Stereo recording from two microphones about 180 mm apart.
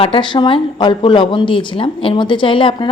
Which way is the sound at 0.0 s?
30° left (ahead or behind).